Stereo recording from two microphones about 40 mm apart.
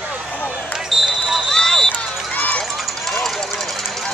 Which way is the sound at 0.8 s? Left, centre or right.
Centre.